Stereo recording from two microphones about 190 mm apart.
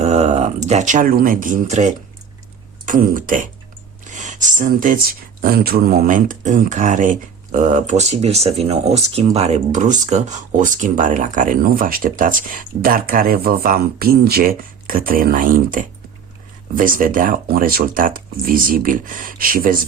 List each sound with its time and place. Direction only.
0.0 s speech: 35° right (ahead or behind)
4.0 s a sound: 40° right (ahead or behind)
5.4 s speech: 50° right (ahead or behind)